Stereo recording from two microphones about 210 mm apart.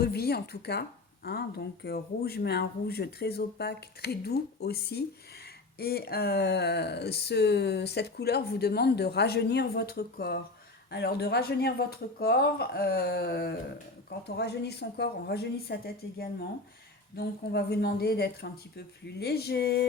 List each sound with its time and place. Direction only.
0.0 s speech: 50° left (ahead or behind)